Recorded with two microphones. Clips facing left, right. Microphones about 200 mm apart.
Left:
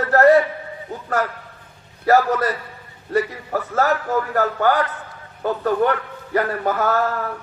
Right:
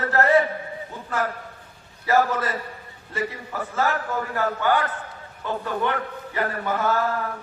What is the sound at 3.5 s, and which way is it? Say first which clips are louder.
A man's voice: left 6 dB; 40° left (ahead or behind).